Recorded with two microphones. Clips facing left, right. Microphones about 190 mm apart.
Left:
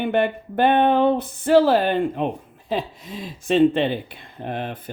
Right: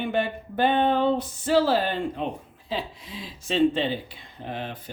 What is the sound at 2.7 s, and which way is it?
Speech, 45° left (ahead or behind).